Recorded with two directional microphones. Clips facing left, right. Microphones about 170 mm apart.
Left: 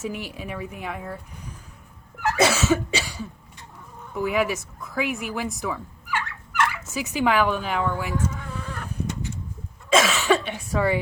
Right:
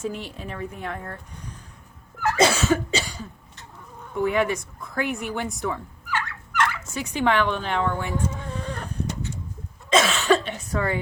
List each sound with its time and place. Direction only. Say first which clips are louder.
0.0 s speech: even; 5° left (ahead or behind)
2.4 s cough: even; 5° left (ahead or behind)
4.1 s speech: right 1 dB; 5° left (ahead or behind)
8.3 s chicken: right 2 dB; 35° right (ahead or behind)
9.9 s cough: even; 5° left (ahead or behind)